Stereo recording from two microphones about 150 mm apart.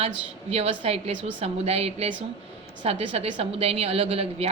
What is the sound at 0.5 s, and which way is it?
A woman's voice, 45° right (ahead or behind).